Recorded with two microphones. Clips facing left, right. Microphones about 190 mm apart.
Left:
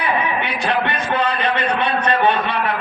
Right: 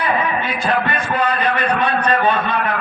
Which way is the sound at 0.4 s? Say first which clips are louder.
Right 1 dB; 70° left (ahead or behind).